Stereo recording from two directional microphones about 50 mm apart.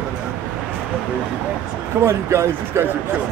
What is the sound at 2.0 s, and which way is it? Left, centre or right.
Speech, right.